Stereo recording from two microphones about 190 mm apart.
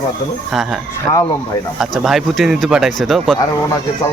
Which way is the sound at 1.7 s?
Centre (ahead or behind).